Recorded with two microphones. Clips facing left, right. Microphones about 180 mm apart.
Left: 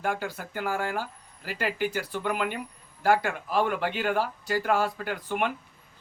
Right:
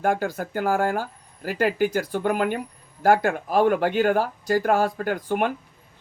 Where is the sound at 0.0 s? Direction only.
45° right (ahead or behind).